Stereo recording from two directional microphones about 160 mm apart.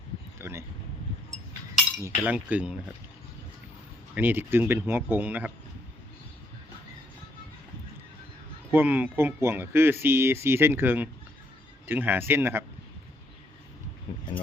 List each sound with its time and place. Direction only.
0.4 s a sound: 15° right (ahead or behind)
2.0 s speech: 15° right (ahead or behind)
4.1 s speech: 10° right (ahead or behind)
8.7 s speech: 10° right (ahead or behind)